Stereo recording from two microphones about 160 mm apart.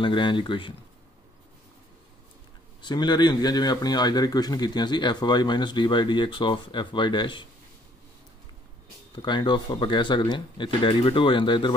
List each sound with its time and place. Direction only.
0.0 s speech: 30° left (ahead or behind)
2.8 s speech: 25° left (ahead or behind)
9.1 s speech: 30° left (ahead or behind)